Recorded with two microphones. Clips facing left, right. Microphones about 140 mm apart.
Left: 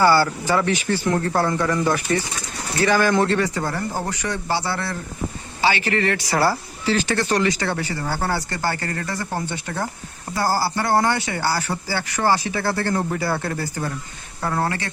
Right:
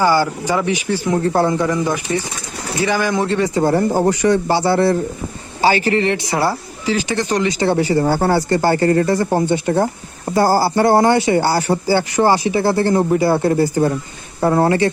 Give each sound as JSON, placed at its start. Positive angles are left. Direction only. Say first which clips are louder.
{"t": 0.0, "sound": "speech", "louder": "right 1 dB", "side_deg": -15}
{"t": 5.6, "sound": "speech", "louder": "right 6 dB", "side_deg": -40}
{"t": 6.0, "sound": "speech", "louder": "right 3 dB", "side_deg": -25}
{"t": 7.9, "sound": "speech", "louder": "right 9 dB", "side_deg": -40}
{"t": 10.3, "sound": "speech", "louder": "right 8 dB", "side_deg": -20}